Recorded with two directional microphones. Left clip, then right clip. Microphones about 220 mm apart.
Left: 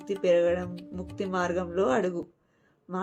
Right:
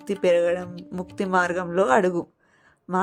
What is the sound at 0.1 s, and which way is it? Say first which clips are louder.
A woman's voice: right 3 dB; 55° right (ahead or behind).